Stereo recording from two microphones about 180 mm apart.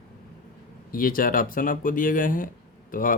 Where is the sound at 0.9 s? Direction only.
50° left (ahead or behind).